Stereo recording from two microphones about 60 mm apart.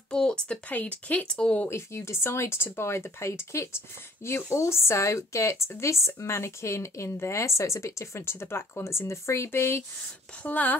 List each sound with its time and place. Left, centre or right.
0.1 s speech: centre
0.7 s speech: left
1.7 s speech: left
10.4 s speech: left